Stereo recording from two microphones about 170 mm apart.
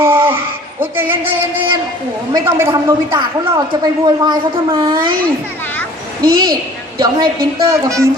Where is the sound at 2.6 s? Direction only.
20° right (ahead or behind).